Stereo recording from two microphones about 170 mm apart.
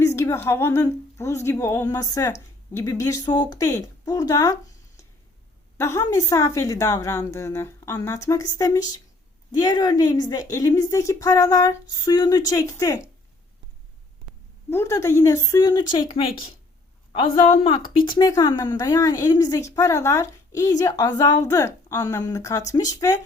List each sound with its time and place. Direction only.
0.0 s a woman's voice: 15° left (ahead or behind)
5.7 s a woman's voice: 15° left (ahead or behind)
14.7 s a woman's voice: 15° left (ahead or behind); by 18.1 s 35° left (ahead or behind)
18.2 s a woman's voice: 20° left (ahead or behind)